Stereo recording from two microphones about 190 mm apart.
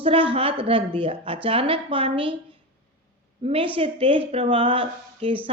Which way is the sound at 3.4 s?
30° right (ahead or behind).